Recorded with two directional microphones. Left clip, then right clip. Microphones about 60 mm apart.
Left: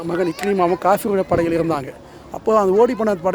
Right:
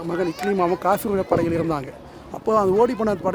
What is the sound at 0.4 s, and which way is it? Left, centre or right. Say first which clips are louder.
Speech: left 4 dB; left.